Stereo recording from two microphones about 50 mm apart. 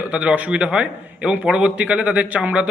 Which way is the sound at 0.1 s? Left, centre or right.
Right.